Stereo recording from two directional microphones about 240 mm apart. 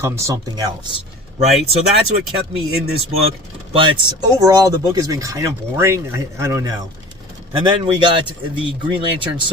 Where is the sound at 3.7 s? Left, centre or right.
Centre.